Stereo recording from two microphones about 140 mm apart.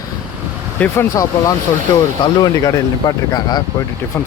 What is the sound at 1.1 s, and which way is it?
Speech, 25° left (ahead or behind).